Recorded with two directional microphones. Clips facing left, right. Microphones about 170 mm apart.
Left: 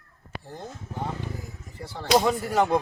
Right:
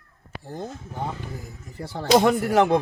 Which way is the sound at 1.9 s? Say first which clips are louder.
Right 4 dB; 65° right (ahead or behind).